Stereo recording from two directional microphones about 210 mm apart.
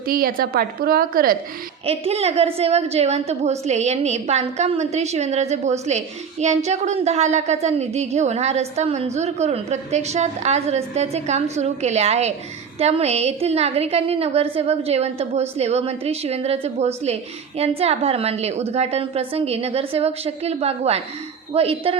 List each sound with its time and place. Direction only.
0.1 s a woman's voice: 45° right (ahead or behind)
1.9 s a woman's voice: 30° right (ahead or behind)